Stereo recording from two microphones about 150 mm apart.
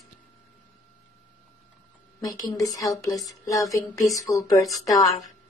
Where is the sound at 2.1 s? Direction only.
20° left (ahead or behind).